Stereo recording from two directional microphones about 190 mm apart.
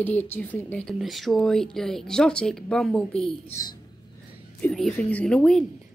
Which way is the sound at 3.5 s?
20° left (ahead or behind).